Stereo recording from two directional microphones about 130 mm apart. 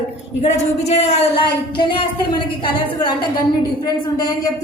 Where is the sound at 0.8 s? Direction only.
60° left (ahead or behind).